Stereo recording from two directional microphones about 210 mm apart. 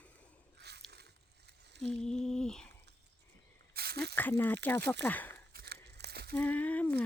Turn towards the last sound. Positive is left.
turn(degrees=5)  # may be behind; listen again after turning